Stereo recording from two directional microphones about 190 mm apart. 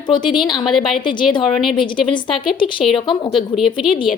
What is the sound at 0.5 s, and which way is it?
A woman's voice, centre (ahead or behind).